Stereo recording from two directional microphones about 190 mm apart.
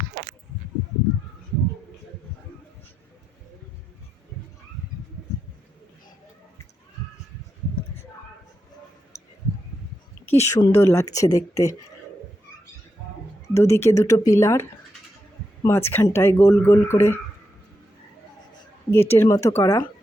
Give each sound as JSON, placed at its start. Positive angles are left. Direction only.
{"t": 10.2, "sound": "a woman's voice", "side_deg": 15}
{"t": 13.5, "sound": "speech", "side_deg": 15}
{"t": 18.9, "sound": "speech", "side_deg": 10}